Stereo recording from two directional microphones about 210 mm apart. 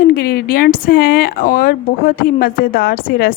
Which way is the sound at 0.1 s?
50° left (ahead or behind).